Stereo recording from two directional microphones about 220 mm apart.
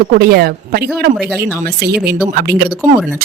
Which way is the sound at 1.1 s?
Centre (ahead or behind).